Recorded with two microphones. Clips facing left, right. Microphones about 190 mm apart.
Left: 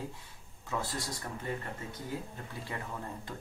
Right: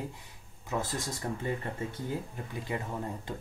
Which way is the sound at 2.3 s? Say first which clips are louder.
Right 5 dB; 20° right (ahead or behind).